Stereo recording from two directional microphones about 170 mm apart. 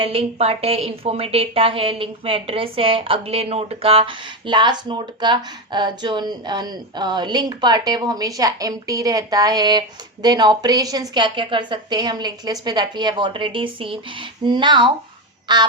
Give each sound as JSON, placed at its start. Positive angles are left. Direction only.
{"t": 0.0, "sound": "a woman's voice", "side_deg": -35}